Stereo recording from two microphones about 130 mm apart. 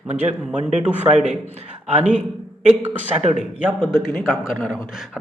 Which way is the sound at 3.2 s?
50° right (ahead or behind).